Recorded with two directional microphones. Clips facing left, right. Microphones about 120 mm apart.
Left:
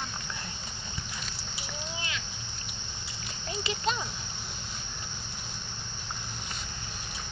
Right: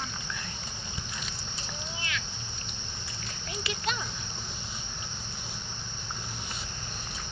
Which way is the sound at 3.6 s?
25° left (ahead or behind).